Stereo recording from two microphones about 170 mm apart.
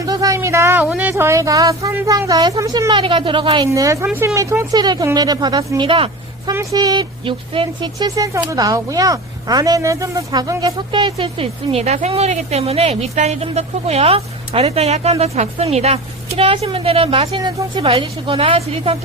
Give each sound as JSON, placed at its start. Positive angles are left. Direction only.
{"t": 0.0, "sound": "a woman's voice", "side_deg": -20}
{"t": 3.7, "sound": "a woman's voice", "side_deg": -20}
{"t": 6.5, "sound": "speech", "side_deg": -20}